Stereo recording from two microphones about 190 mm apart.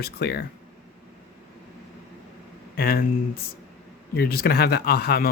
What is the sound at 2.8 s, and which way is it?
Speech, 50° left (ahead or behind).